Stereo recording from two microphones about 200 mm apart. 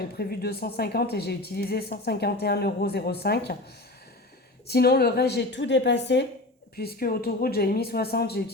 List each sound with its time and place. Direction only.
0.2 s a woman's voice: 50° left (ahead or behind)
4.7 s a woman's voice: 50° left (ahead or behind)